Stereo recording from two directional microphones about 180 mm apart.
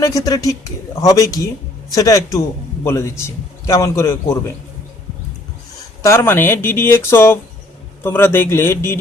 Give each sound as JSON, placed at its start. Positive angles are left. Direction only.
{"t": 0.0, "sound": "a man's voice", "side_deg": 20}
{"t": 6.0, "sound": "a man's voice", "side_deg": 15}